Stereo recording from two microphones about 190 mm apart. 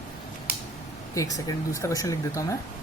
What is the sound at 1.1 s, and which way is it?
Speech, 20° left (ahead or behind).